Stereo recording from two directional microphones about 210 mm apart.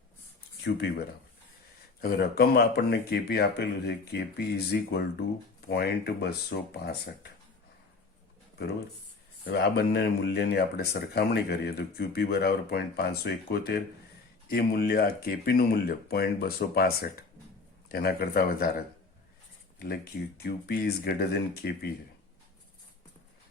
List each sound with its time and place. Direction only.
0.6 s speech: 50° left (ahead or behind)
9.5 s speech: 50° left (ahead or behind)
20.4 s speech: 45° left (ahead or behind)